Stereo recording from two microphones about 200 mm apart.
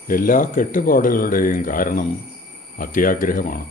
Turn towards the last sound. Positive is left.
turn(degrees=45)  # may be behind; listen again after turning